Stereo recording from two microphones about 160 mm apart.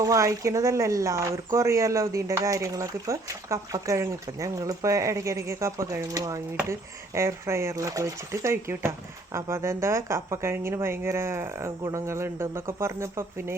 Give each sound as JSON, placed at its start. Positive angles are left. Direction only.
{"t": 0.0, "sound": "speech", "side_deg": -20}